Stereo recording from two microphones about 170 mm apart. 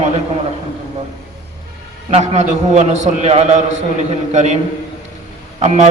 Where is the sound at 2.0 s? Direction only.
40° right (ahead or behind).